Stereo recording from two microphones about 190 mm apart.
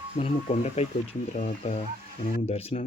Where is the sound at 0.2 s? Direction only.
30° left (ahead or behind).